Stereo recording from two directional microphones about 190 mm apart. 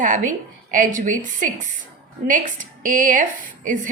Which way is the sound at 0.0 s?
45° right (ahead or behind).